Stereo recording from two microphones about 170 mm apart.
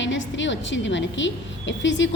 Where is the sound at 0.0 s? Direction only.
90° left.